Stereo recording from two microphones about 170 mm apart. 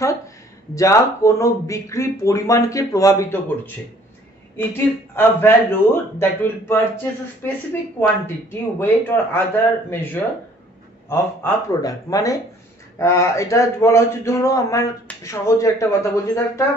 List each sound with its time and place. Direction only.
0.7 s a man's voice: 20° left (ahead or behind)
8.5 s a man's voice: 15° left (ahead or behind)